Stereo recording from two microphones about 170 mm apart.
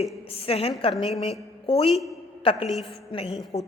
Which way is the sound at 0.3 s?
35° left (ahead or behind).